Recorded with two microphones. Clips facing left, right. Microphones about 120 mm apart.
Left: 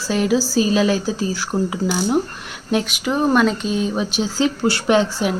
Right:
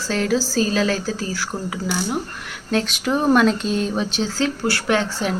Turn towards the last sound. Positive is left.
turn(degrees=15)  # may be behind; listen again after turning